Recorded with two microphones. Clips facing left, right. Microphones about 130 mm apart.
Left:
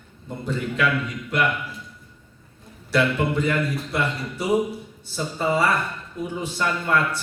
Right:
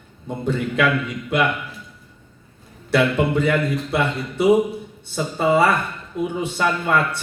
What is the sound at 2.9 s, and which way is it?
A man's voice, 70° right (ahead or behind).